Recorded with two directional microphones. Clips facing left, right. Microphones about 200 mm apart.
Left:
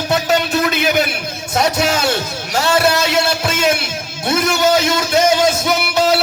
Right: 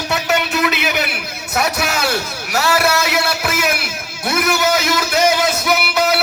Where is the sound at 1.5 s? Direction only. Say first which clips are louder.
Left 3 dB; 30° left (ahead or behind).